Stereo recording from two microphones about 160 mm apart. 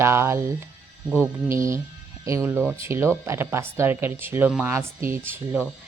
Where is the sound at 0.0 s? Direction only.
15° right (ahead or behind).